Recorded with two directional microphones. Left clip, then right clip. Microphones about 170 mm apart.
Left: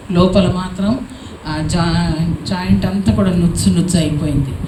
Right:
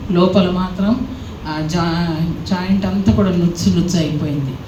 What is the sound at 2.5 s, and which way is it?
A woman's voice, 50° left (ahead or behind).